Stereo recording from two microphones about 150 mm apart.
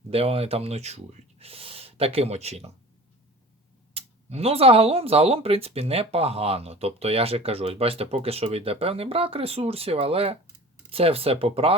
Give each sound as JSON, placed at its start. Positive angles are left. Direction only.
{"t": 0.1, "sound": "speech", "side_deg": -40}
{"t": 3.9, "sound": "speech", "side_deg": -40}